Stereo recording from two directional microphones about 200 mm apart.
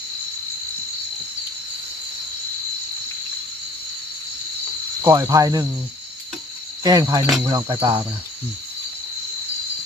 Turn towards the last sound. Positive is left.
turn(degrees=-20)  # may be behind; listen again after turning